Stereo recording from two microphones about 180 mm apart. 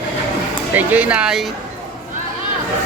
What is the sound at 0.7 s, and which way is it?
Speech, 10° right (ahead or behind).